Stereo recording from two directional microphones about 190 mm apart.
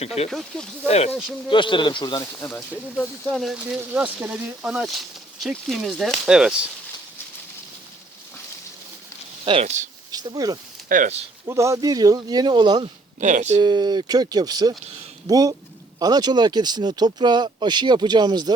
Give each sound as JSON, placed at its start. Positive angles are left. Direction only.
{"t": 0.3, "sound": "speech", "side_deg": 0}
{"t": 0.9, "sound": "speech", "side_deg": 35}
{"t": 2.4, "sound": "speech", "side_deg": 10}
{"t": 3.4, "sound": "speech", "side_deg": -5}
{"t": 9.4, "sound": "speech", "side_deg": -30}
{"t": 10.1, "sound": "speech", "side_deg": -20}
{"t": 10.8, "sound": "speech", "side_deg": -45}
{"t": 11.4, "sound": "speech", "side_deg": -15}
{"t": 13.1, "sound": "speech", "side_deg": -40}
{"t": 13.6, "sound": "speech", "side_deg": -25}